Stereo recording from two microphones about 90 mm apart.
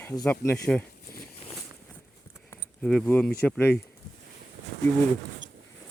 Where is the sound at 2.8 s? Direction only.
Centre (ahead or behind).